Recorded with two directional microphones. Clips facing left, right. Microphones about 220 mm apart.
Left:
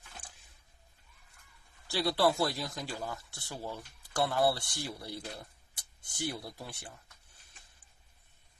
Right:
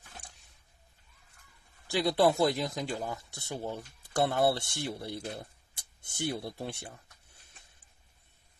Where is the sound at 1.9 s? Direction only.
20° right (ahead or behind).